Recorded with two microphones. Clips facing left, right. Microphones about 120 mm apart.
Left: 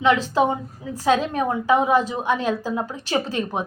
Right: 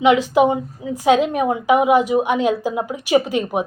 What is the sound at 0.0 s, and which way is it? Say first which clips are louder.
Speech: right 5 dB; 15° right (ahead or behind).